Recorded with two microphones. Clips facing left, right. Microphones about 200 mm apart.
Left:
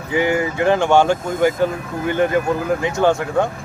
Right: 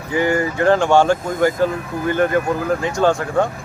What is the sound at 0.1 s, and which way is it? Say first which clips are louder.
Speech: even; 15° left (ahead or behind).